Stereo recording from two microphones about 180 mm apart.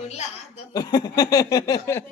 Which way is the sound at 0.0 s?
40° left (ahead or behind).